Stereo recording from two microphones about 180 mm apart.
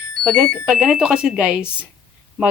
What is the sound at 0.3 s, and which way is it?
Speech, centre (ahead or behind).